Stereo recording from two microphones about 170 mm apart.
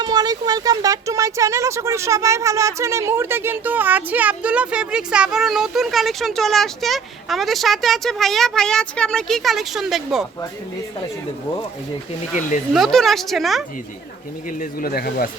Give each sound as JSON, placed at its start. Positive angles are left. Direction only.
{"t": 0.0, "sound": "speech", "side_deg": -25}
{"t": 12.7, "sound": "speech", "side_deg": 0}
{"t": 14.6, "sound": "speech", "side_deg": 60}